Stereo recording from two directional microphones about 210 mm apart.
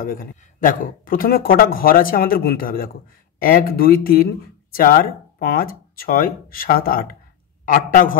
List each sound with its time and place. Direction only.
0.0 s a man's voice: 45° left (ahead or behind)